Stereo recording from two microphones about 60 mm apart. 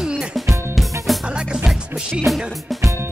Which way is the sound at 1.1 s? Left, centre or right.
Centre.